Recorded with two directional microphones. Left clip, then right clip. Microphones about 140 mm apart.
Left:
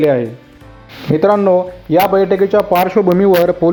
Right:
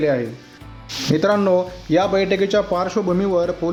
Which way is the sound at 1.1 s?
20° left (ahead or behind).